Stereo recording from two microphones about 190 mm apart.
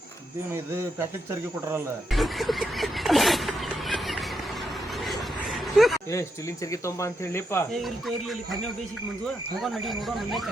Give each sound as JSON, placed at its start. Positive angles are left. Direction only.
{"t": 0.5, "sound": "speech", "side_deg": -15}
{"t": 2.0, "sound": "a sound", "side_deg": 0}
{"t": 6.1, "sound": "speech", "side_deg": 15}
{"t": 7.7, "sound": "speech", "side_deg": 0}